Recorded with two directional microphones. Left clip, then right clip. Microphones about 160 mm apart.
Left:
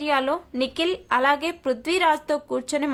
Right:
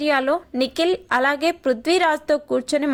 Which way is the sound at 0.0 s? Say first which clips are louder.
Right 3 dB; 25° right (ahead or behind).